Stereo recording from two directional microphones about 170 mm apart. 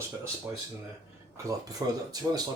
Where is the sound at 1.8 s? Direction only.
20° right (ahead or behind).